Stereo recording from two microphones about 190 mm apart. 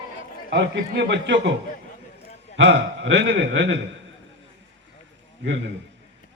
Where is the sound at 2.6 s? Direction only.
70° right (ahead or behind).